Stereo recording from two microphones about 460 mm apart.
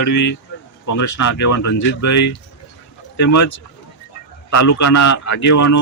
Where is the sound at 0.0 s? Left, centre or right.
Left.